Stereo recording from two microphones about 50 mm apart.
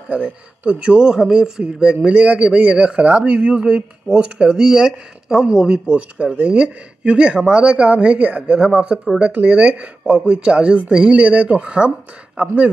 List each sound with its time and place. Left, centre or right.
0.1 s speech: right
3.0 s speech: right
3.3 s speech: centre
5.9 s speech: right